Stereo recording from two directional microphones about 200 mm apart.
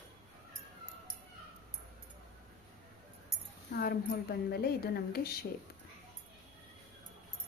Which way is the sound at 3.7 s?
50° left (ahead or behind).